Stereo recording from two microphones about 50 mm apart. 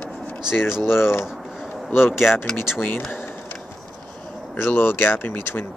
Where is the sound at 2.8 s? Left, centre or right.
Left.